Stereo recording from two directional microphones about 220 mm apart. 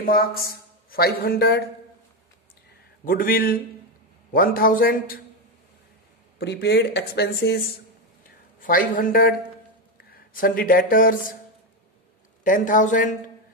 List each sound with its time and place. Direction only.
0.0 s speech: 40° left (ahead or behind)
3.1 s a man's voice: 40° left (ahead or behind)
6.3 s speech: 50° left (ahead or behind)
8.6 s a man's voice: 40° left (ahead or behind)
12.4 s a man's voice: 35° left (ahead or behind)